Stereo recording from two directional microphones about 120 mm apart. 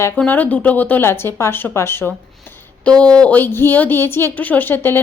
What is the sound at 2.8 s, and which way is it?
A woman's voice, 10° left (ahead or behind).